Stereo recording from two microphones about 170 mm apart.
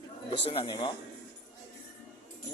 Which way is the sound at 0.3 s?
35° left (ahead or behind).